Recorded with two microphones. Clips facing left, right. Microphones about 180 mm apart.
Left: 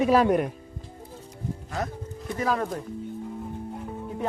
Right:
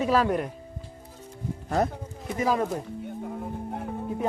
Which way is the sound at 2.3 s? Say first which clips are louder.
Right 2 dB; 15° right (ahead or behind).